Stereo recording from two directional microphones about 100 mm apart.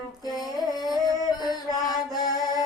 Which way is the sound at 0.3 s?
Centre (ahead or behind).